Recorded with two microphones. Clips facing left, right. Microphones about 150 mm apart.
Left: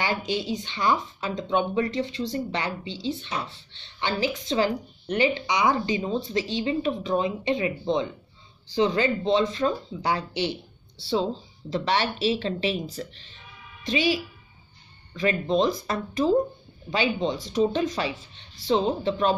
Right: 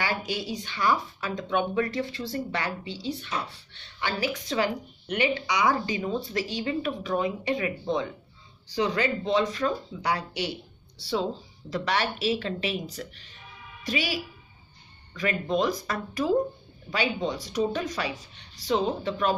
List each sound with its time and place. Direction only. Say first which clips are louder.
0.0 s speech: left 3 dB; 25° left (ahead or behind)